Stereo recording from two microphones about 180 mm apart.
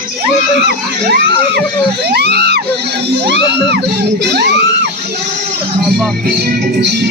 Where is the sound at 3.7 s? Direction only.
65° right (ahead or behind).